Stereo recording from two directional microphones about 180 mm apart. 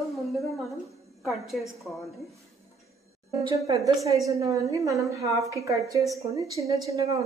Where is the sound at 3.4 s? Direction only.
20° right (ahead or behind).